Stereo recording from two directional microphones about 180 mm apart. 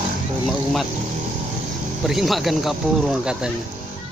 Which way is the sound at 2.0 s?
Centre (ahead or behind).